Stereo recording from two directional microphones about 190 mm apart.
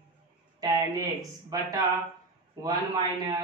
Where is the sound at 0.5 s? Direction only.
20° right (ahead or behind).